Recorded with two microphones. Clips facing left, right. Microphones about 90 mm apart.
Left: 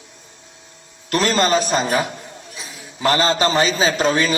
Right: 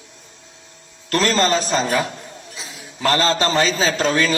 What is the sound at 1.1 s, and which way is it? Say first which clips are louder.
A man's voice: left 1 dB; 15° left (ahead or behind).